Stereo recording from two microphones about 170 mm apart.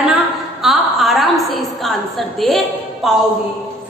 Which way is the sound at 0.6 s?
Centre (ahead or behind).